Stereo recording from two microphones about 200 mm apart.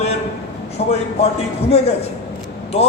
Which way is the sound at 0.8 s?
35° left (ahead or behind).